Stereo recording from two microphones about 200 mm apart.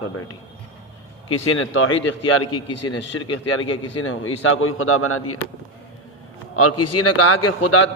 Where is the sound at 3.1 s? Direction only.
90° left.